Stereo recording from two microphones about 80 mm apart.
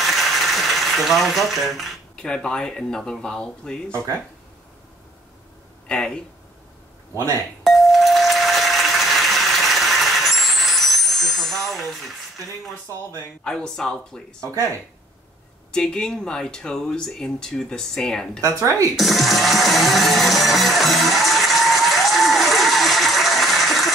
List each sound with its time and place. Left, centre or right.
0.0 s a sound: centre
2.1 s speech: centre
5.9 s speech: centre
7.6 s ding: centre
13.4 s speech: centre
15.7 s speech: centre
18.4 s speech: right
18.9 s music: centre